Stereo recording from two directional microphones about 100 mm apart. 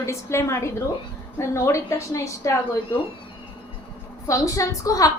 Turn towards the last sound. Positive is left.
turn(degrees=35)  # may be behind; listen again after turning